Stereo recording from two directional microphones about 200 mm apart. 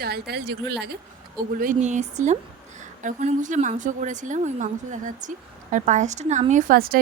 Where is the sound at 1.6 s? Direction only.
40° right (ahead or behind).